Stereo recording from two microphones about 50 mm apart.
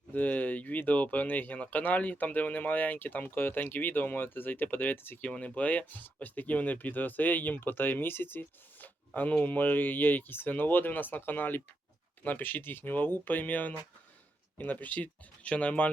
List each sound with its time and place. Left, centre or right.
0.1 s speech: left
5.2 s speech: left